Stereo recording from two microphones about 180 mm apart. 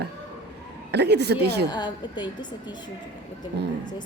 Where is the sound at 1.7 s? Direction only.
25° left (ahead or behind).